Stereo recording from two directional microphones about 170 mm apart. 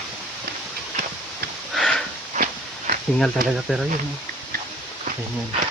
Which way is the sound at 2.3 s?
50° right (ahead or behind).